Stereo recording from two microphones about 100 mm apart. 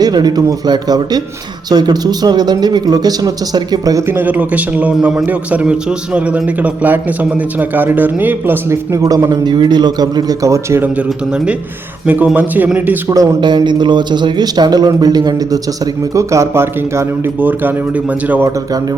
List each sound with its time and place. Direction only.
0.0 s speech: 45° right (ahead or behind)
4.0 s a man's voice: 20° right (ahead or behind)
10.9 s speech: 10° right (ahead or behind)
13.4 s a man's voice: 50° right (ahead or behind); by 18.4 s 15° right (ahead or behind)